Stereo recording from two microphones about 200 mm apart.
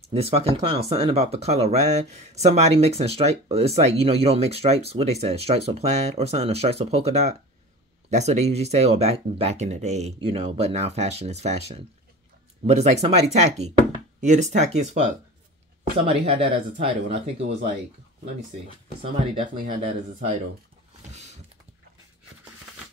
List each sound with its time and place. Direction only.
0.1 s speech: 30° right (ahead or behind)
16.1 s speech: 30° right (ahead or behind)